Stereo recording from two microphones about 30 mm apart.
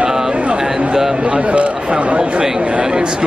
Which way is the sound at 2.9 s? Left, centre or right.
Right.